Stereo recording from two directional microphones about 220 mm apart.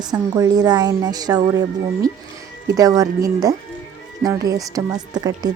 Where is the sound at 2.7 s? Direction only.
15° right (ahead or behind).